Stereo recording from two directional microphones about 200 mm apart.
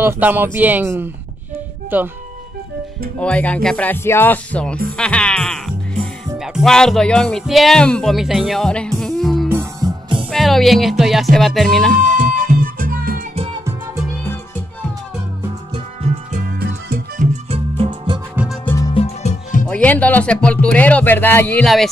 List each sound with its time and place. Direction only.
0.0 s speech: 10° right (ahead or behind)
3.2 s speech: 5° left (ahead or behind)
4.9 s music: 5° left (ahead or behind)
6.3 s speech: centre (ahead or behind)
9.5 s music: 15° right (ahead or behind)
10.3 s music: centre (ahead or behind)
11.9 s music: 45° right (ahead or behind)
15.7 s music: 30° right (ahead or behind)
18.3 s music: 5° right (ahead or behind)
18.9 s music: 35° left (ahead or behind)
19.7 s speech: 5° left (ahead or behind)